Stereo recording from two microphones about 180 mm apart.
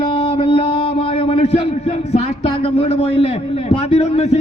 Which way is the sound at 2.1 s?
35° left (ahead or behind).